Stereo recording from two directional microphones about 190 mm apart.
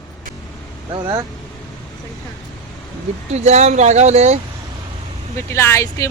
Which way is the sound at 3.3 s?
35° right (ahead or behind).